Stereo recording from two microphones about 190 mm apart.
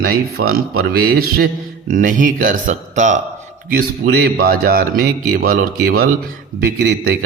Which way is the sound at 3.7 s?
55° right (ahead or behind).